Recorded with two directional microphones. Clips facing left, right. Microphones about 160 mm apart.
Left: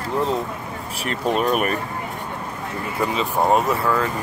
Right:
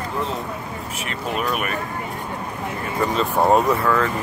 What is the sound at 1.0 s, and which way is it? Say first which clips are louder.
Speech: left 5 dB; 35° left (ahead or behind).